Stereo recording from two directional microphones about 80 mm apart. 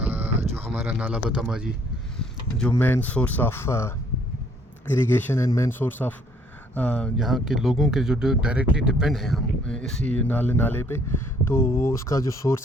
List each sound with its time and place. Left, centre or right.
0.0 s a sound: right
0.7 s speech: centre
2.7 s speech: left
7.2 s speech: centre; by 12.6 s left